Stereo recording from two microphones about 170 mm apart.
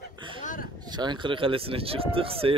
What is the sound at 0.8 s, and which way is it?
Speech, 25° right (ahead or behind).